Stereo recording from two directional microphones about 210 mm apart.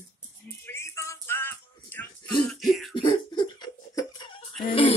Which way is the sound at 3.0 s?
20° left (ahead or behind).